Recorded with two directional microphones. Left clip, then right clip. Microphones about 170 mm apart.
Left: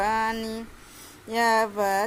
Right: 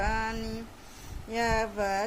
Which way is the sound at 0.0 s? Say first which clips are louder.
Left 6 dB; 30° left (ahead or behind).